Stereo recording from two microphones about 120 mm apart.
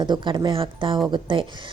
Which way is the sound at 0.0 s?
40° right (ahead or behind).